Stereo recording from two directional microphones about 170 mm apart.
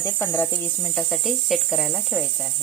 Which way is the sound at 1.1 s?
Centre (ahead or behind).